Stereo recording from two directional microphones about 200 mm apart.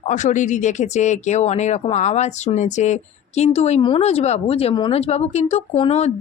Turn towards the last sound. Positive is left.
turn(degrees=30)  # may be behind; listen again after turning